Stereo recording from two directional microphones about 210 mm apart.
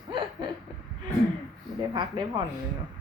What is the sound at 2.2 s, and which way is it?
Speech, 20° right (ahead or behind).